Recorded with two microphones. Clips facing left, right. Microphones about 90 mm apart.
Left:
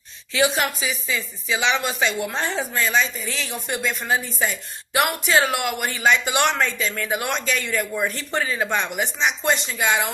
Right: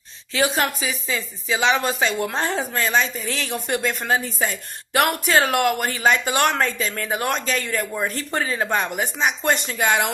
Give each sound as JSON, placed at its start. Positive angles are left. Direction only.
{"t": 0.3, "sound": "a woman's voice", "side_deg": -40}